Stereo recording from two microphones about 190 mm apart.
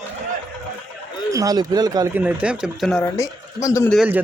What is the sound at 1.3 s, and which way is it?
Speech, 20° right (ahead or behind).